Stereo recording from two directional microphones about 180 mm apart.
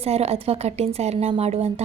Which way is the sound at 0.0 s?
35° right (ahead or behind).